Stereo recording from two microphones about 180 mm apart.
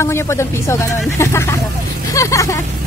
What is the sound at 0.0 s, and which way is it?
Speech, 15° left (ahead or behind).